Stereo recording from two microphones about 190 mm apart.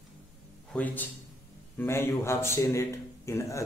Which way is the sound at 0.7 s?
10° left (ahead or behind).